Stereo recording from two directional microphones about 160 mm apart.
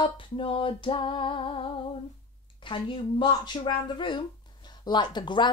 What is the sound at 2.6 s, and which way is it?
Female singing, 30° left (ahead or behind).